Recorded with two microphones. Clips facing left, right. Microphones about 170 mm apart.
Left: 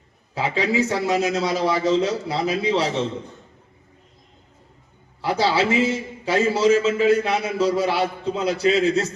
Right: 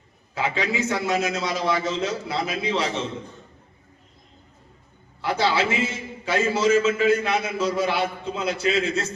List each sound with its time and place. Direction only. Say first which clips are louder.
0.3 s a man's voice: left 4 dB; 35° left (ahead or behind)
5.2 s a man's voice: left 2 dB; 35° left (ahead or behind)